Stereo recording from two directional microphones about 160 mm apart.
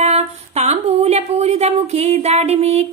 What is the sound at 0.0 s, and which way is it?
A woman's voice, 40° right (ahead or behind).